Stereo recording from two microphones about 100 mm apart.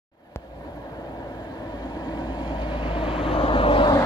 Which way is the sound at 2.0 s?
45° left (ahead or behind).